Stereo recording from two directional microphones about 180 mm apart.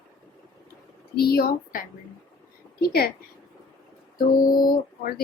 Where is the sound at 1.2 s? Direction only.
60° left (ahead or behind).